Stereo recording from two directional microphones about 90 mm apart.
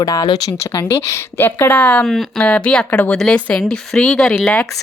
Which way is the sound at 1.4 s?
20° left (ahead or behind).